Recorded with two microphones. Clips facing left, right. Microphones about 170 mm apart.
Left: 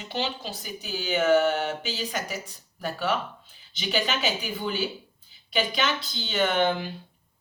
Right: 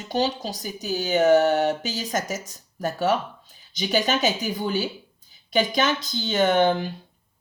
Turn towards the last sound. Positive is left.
turn(degrees=-40)  # may be behind; listen again after turning